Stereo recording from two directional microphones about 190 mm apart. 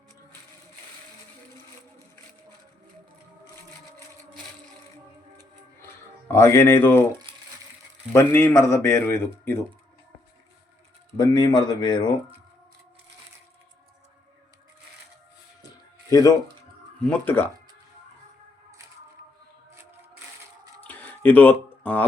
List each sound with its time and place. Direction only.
6.3 s speech: 15° left (ahead or behind)
7.3 s crumpling: 25° right (ahead or behind)
8.1 s speech: 10° left (ahead or behind)
11.2 s speech: 20° left (ahead or behind)
16.0 s speech: 20° left (ahead or behind)
20.8 s a sound: 10° left (ahead or behind)